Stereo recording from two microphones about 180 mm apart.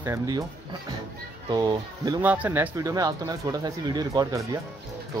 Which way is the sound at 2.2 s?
10° right (ahead or behind).